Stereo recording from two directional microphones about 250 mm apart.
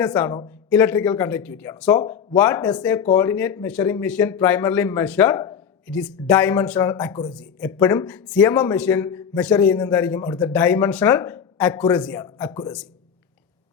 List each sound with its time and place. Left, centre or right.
0.0 s speech: centre